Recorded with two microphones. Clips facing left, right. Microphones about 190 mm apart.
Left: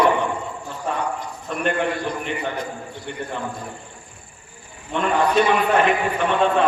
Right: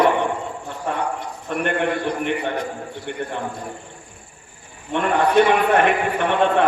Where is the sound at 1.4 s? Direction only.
60° right (ahead or behind).